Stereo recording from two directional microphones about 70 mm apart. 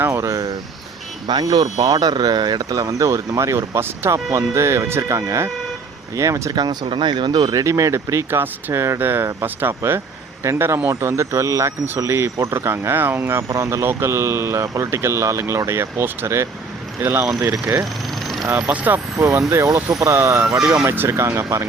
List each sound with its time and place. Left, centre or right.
0.1 s speech: right
1.3 s speech: right
6.5 s speech: right
7.6 s speech: right
17.4 s speech: right
18.1 s vehicle: centre
18.7 s speech: right
19.1 s speech: right